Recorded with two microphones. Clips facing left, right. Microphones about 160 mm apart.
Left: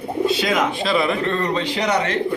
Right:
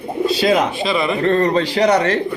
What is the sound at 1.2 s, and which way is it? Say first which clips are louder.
Speech: right 6 dB; 40° right (ahead or behind).